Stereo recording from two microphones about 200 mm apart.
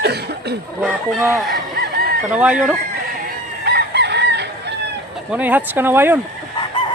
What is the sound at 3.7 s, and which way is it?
Chicken, 55° right (ahead or behind).